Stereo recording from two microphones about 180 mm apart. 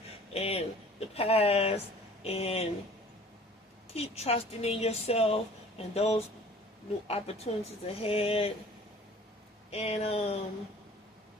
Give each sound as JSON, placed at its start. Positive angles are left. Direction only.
{"t": 0.3, "sound": "speech", "side_deg": 35}
{"t": 3.9, "sound": "speech", "side_deg": 35}
{"t": 9.6, "sound": "speech", "side_deg": 35}